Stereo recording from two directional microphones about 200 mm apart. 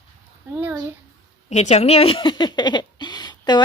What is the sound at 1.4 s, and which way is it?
Speech, 35° left (ahead or behind).